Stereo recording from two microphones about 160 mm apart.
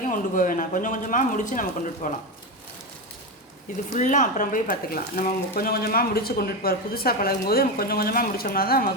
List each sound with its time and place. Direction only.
0.0 s speech: 55° left (ahead or behind)
3.9 s speech: 50° left (ahead or behind); by 8.9 s 70° left (ahead or behind)